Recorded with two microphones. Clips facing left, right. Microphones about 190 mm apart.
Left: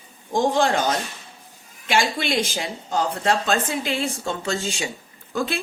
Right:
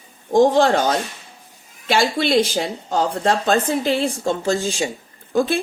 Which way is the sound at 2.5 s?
50° right (ahead or behind).